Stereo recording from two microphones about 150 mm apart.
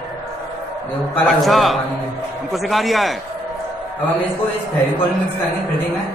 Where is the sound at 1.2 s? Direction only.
Centre (ahead or behind).